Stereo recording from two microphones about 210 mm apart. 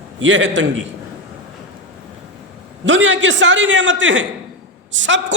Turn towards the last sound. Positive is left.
turn(degrees=-60)  # may be behind; listen again after turning